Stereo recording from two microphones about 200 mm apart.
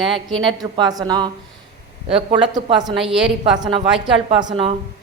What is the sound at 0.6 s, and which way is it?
A woman's voice, 20° right (ahead or behind).